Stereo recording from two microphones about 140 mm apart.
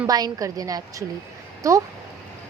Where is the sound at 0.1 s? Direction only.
25° right (ahead or behind).